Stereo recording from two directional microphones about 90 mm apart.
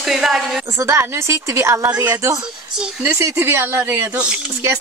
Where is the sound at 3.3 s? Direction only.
25° right (ahead or behind).